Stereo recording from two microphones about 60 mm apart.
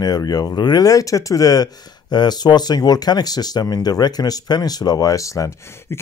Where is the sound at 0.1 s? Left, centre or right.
Left.